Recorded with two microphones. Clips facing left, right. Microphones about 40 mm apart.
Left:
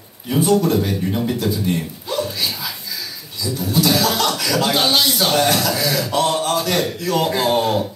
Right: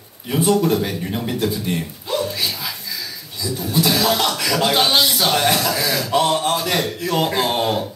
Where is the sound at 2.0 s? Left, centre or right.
Right.